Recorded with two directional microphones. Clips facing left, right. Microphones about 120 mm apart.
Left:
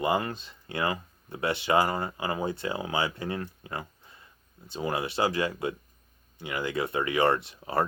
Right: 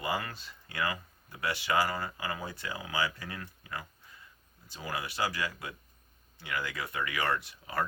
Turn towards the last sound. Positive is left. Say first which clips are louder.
# left 6 dB
turn(degrees=30)  # may be behind; listen again after turning